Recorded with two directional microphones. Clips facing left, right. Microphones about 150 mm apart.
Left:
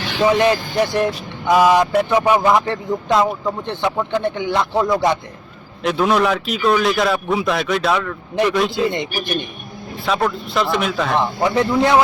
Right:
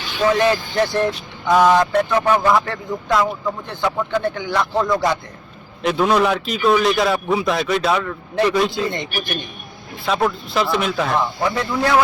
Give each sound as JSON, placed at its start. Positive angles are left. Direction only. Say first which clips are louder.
{"t": 0.2, "sound": "speech", "louder": "left 1 dB", "side_deg": 20}
{"t": 4.7, "sound": "a man's voice", "louder": "left 1 dB", "side_deg": 10}
{"t": 8.8, "sound": "speech", "louder": "left 4 dB", "side_deg": 20}
{"t": 10.1, "sound": "a man's voice", "louder": "even", "side_deg": 0}
{"t": 11.4, "sound": "speech", "louder": "left 7 dB", "side_deg": 20}